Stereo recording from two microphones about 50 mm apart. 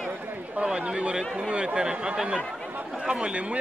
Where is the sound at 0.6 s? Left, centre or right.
Right.